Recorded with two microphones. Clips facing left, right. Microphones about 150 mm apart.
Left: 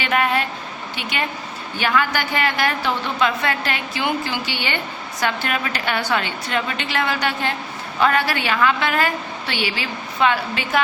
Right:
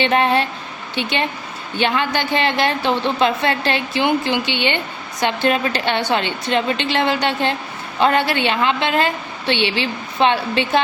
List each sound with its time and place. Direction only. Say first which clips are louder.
0.0 s a woman's voice: right 4 dB; 30° right (ahead or behind)